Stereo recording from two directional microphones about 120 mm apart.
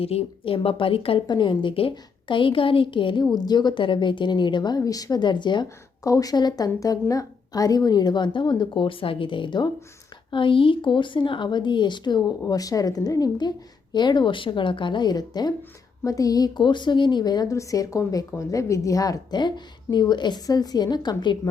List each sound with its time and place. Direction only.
0.0 s a woman's voice: 55° left (ahead or behind); by 5.6 s 40° left (ahead or behind)
5.6 s speech: 30° left (ahead or behind)